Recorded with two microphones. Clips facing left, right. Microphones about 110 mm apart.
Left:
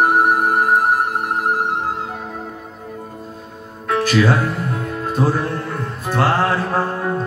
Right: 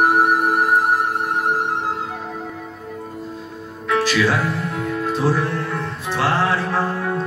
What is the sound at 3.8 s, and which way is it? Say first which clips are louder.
Music: left 2 dB; 45° left (ahead or behind).